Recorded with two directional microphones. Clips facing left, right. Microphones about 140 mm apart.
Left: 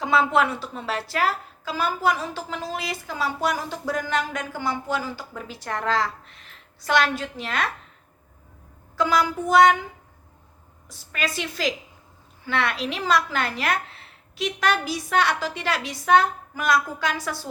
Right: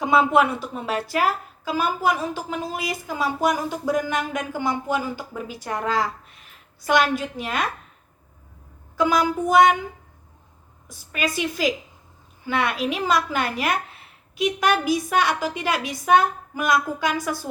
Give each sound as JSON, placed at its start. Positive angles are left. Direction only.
{"t": 0.0, "sound": "a sound", "side_deg": -15}
{"t": 0.7, "sound": "speech", "side_deg": -15}
{"t": 9.0, "sound": "speech", "side_deg": -15}
{"t": 11.3, "sound": "speech", "side_deg": -15}